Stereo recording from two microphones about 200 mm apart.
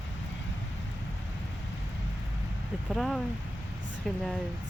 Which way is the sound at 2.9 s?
Centre (ahead or behind).